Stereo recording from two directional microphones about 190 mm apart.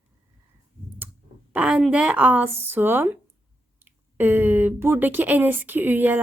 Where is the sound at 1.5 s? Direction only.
5° right (ahead or behind).